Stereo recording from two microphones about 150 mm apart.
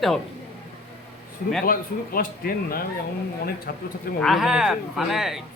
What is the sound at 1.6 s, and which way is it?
A man's voice, 75° left (ahead or behind).